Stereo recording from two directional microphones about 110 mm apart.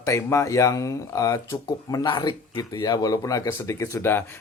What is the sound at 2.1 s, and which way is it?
Speech, 45° left (ahead or behind).